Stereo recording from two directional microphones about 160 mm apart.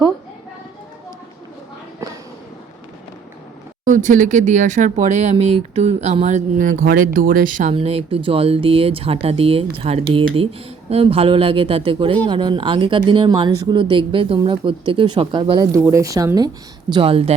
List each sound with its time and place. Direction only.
3.8 s speech: 50° right (ahead or behind)
7.7 s speech: 35° right (ahead or behind); by 16.5 s 20° right (ahead or behind)
16.9 s speech: 35° right (ahead or behind)